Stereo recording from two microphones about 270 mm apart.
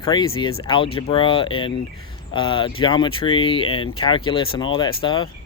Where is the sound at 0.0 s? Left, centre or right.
Centre.